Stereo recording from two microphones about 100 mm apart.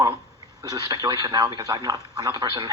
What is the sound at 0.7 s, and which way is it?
Speech, 40° right (ahead or behind).